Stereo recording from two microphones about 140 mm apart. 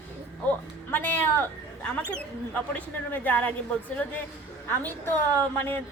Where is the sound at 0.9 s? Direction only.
15° left (ahead or behind).